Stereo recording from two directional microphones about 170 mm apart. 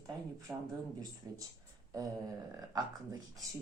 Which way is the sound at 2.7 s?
20° right (ahead or behind).